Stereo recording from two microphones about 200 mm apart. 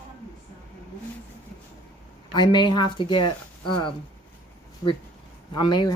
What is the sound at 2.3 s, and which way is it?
Speech, 20° left (ahead or behind).